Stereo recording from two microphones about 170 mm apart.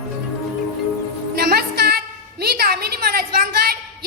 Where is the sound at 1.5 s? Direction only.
70° right (ahead or behind).